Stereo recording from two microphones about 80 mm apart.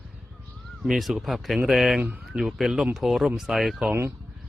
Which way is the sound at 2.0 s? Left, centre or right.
Centre.